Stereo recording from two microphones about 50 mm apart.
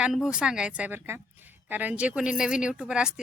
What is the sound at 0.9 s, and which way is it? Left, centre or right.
Speech, right.